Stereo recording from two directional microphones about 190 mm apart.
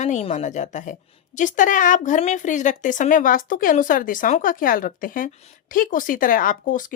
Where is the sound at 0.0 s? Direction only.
40° left (ahead or behind).